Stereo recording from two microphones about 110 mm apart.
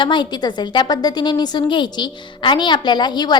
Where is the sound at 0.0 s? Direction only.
45° left (ahead or behind).